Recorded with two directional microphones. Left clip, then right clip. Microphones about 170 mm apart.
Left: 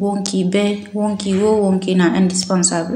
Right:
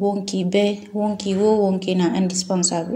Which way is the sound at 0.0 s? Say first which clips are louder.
Left 2 dB; 15° right (ahead or behind).